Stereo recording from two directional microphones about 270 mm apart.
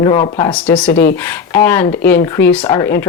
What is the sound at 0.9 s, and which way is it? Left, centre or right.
Speech, left.